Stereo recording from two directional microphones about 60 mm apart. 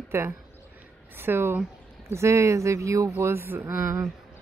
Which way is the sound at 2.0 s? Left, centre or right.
Right.